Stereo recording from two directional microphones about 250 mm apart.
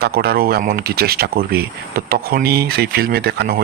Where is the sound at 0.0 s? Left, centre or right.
Right.